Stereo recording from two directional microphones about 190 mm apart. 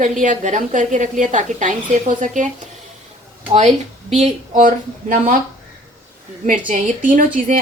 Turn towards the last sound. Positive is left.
turn(degrees=-45)  # may be behind; listen again after turning